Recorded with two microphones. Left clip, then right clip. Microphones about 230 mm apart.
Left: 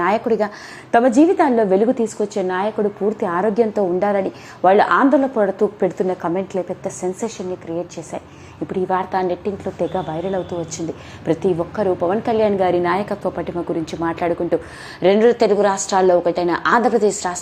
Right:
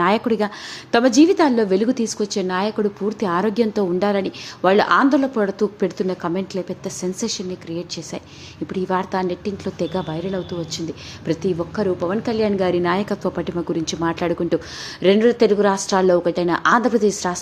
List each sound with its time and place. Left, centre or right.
0.0 s a woman's voice: right
8.6 s a woman's voice: centre